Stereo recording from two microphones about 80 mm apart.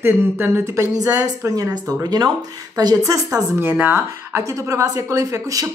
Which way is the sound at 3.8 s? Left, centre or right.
Right.